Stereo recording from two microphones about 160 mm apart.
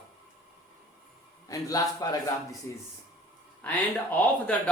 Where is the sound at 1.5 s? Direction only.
20° left (ahead or behind).